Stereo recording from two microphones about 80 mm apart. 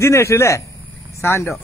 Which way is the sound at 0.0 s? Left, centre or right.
Left.